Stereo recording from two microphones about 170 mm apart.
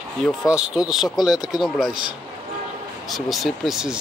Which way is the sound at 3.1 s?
Centre (ahead or behind).